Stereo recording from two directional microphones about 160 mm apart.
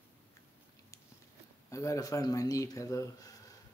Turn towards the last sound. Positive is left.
turn(degrees=20)  # may be behind; listen again after turning